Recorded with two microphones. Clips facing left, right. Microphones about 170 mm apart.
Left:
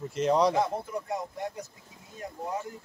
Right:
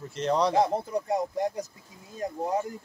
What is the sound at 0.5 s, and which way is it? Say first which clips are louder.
Speech: right 4 dB; 35° right (ahead or behind).